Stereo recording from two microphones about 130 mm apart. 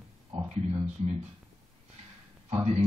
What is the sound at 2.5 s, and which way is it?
Speech, 55° right (ahead or behind).